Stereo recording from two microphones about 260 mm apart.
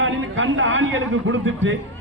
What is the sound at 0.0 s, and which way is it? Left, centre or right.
A man's voice, right.